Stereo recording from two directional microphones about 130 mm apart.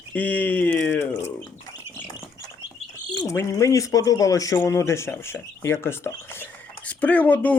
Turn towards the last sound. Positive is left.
turn(degrees=10)  # may be behind; listen again after turning